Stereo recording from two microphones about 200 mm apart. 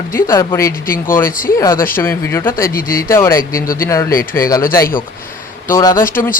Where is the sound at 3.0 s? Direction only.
15° left (ahead or behind).